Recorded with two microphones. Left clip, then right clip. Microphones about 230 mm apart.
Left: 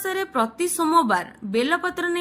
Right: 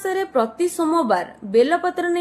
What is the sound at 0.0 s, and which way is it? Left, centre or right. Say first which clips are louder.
A woman's voice: right 3 dB; left.